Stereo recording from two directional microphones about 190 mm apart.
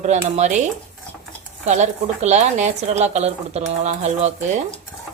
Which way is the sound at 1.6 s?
35° right (ahead or behind).